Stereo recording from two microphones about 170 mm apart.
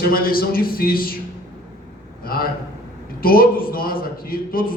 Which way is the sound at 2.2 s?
60° left (ahead or behind).